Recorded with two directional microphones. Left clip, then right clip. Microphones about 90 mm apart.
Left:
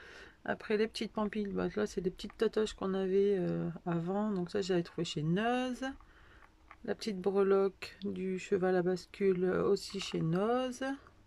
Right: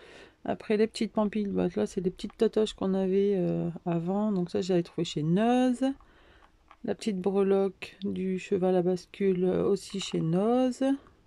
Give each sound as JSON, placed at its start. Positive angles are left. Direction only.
{"t": 0.1, "sound": "speech", "side_deg": -35}